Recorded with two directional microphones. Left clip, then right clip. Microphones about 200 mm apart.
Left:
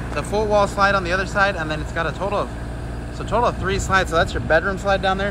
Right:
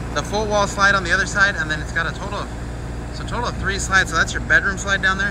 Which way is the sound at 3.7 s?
10° left (ahead or behind).